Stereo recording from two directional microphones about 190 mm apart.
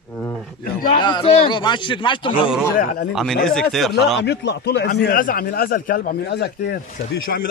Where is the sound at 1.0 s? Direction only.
25° left (ahead or behind).